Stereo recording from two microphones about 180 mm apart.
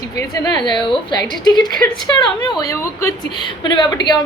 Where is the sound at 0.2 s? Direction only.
20° left (ahead or behind).